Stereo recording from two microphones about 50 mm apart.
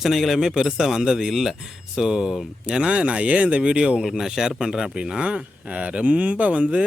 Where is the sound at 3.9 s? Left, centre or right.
Centre.